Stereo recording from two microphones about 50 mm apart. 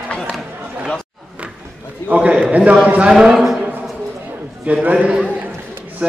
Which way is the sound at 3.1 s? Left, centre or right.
Centre.